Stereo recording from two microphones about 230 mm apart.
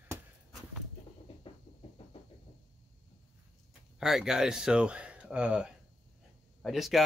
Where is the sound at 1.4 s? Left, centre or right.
Left.